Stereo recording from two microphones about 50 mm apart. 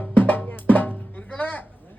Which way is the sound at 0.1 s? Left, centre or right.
Left.